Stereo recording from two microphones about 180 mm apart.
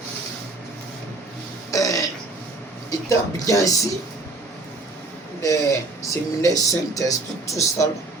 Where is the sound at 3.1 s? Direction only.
20° left (ahead or behind).